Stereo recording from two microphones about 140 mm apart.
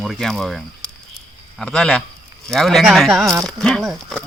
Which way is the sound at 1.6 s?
5° left (ahead or behind).